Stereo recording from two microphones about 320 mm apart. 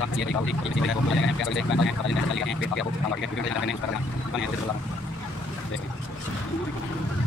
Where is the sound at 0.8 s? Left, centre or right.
Left.